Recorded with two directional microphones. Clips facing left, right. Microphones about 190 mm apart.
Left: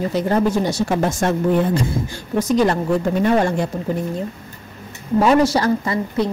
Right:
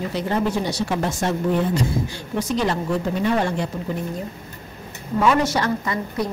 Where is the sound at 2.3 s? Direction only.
45° left (ahead or behind).